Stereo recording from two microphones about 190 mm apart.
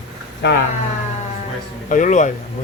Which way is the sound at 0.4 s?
65° left (ahead or behind).